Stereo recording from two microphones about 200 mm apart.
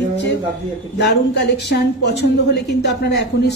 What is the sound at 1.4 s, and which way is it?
A woman's voice, 55° left (ahead or behind).